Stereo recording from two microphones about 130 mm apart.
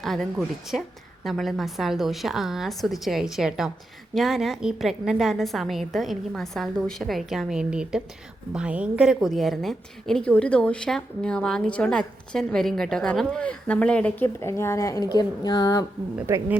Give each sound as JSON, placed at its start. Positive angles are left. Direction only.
{"t": 0.0, "sound": "a woman's voice", "side_deg": 0}
{"t": 16.2, "sound": "a woman's voice", "side_deg": -20}